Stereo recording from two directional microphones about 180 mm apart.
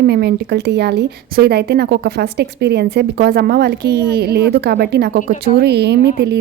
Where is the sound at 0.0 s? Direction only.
65° right (ahead or behind).